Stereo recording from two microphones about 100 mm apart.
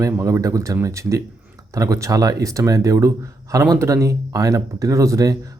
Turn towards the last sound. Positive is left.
turn(degrees=-35)  # may be behind; listen again after turning